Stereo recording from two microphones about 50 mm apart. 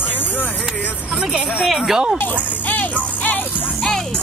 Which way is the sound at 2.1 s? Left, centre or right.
Left.